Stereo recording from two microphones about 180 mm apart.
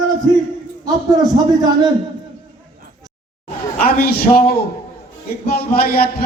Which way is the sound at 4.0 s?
55° left (ahead or behind).